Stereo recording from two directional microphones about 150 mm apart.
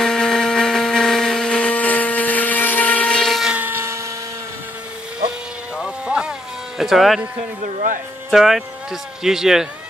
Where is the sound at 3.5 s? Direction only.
15° right (ahead or behind).